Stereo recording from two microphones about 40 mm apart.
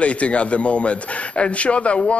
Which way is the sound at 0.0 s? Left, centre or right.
Left.